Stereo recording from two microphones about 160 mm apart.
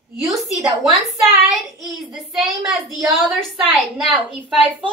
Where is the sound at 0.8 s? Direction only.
Centre (ahead or behind).